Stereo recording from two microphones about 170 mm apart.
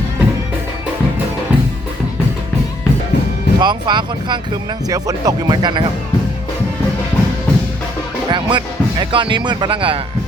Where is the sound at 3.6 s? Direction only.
25° right (ahead or behind).